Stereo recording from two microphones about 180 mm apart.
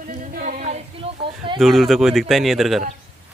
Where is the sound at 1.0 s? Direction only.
35° right (ahead or behind).